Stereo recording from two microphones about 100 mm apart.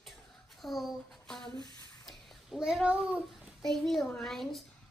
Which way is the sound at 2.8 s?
15° right (ahead or behind).